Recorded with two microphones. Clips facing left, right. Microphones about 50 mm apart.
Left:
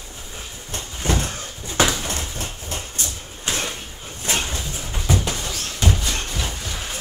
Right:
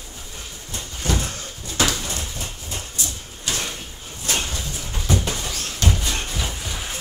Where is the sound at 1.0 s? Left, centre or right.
Left.